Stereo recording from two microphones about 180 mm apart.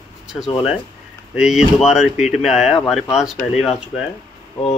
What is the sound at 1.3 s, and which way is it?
Speech, 5° right (ahead or behind).